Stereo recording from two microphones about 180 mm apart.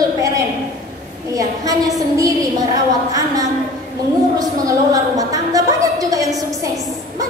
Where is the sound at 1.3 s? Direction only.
20° right (ahead or behind).